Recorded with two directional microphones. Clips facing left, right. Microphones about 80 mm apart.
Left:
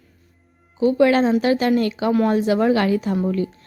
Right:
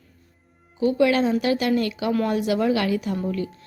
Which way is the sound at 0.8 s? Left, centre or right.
Left.